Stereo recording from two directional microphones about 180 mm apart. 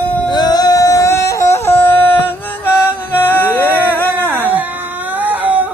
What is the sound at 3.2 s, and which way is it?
Music, 10° left (ahead or behind).